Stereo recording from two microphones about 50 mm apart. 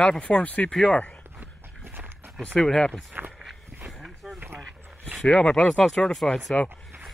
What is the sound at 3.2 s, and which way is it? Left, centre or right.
Walk, right.